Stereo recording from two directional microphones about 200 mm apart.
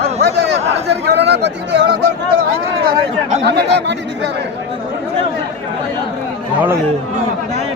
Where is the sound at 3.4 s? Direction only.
60° right (ahead or behind).